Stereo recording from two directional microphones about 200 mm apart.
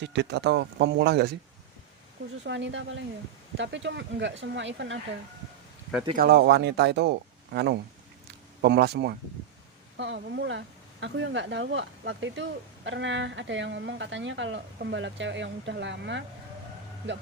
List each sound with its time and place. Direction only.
0.0 s speech: 60° right (ahead or behind)
2.4 s speech: 65° right (ahead or behind)
6.1 s speech: 50° right (ahead or behind)